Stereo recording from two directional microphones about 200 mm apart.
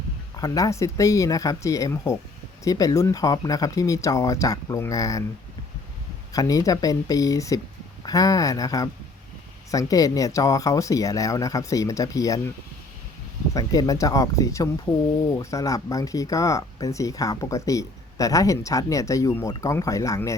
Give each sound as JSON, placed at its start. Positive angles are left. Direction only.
{"t": 0.3, "sound": "speech", "side_deg": 15}
{"t": 6.3, "sound": "speech", "side_deg": 15}
{"t": 13.5, "sound": "speech", "side_deg": 15}